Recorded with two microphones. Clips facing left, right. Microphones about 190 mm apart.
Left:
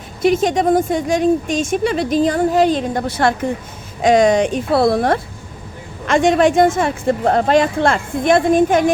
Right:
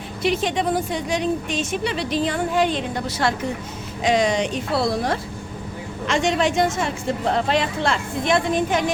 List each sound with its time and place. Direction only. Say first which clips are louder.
0.2 s a woman's voice: left 7 dB; 45° left (ahead or behind)
3.1 s a woman's voice: left 5 dB; 55° left (ahead or behind)